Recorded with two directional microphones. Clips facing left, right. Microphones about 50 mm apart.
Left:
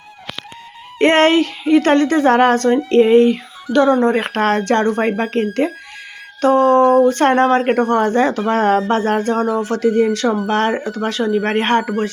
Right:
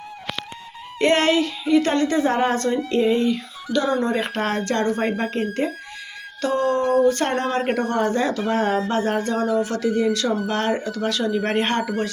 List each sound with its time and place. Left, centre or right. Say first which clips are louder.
0.9 s a woman's voice: left 6 dB; left
4.9 s speech: left 5 dB; left
6.4 s speech: left 9 dB; left
9.0 s speech: left 5 dB; left